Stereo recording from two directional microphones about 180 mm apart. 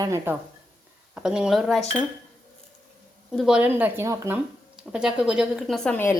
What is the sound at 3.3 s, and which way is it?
Speech, 5° right (ahead or behind).